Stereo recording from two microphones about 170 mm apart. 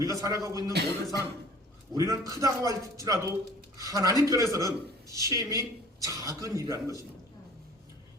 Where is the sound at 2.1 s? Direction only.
20° right (ahead or behind).